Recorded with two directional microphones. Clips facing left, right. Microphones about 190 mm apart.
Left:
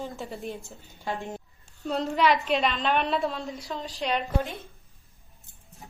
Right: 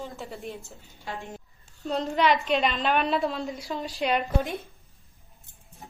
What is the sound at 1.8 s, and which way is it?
Dishes, centre (ahead or behind).